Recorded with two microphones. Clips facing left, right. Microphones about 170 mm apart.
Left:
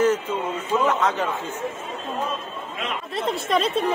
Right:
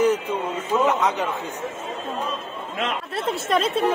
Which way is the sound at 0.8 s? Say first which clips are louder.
Even; 15° right (ahead or behind).